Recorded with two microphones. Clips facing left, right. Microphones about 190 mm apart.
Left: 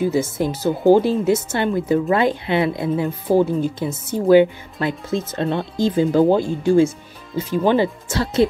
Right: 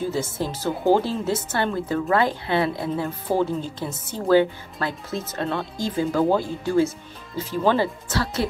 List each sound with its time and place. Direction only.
0.0 s speech: 15° left (ahead or behind)